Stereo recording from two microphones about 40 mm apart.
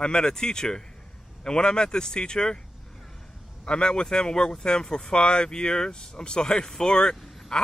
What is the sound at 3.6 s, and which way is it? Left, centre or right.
Speech, left.